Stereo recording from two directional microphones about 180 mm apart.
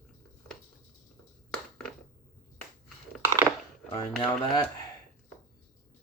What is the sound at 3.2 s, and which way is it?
Crushing, 15° right (ahead or behind).